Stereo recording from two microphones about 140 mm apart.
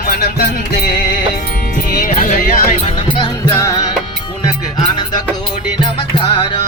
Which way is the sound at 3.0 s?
35° left (ahead or behind).